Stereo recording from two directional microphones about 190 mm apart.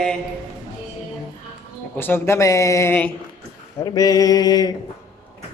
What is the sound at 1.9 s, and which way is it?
Speech, 10° left (ahead or behind).